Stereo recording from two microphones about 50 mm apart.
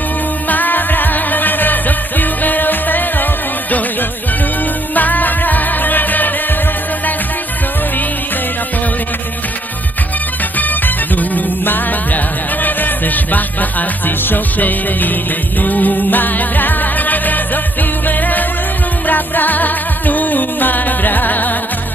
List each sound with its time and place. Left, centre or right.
0.5 s music: left
4.9 s music: left
10.6 s music: left